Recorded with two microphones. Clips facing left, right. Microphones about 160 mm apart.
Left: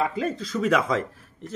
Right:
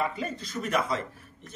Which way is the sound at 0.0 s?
90° left.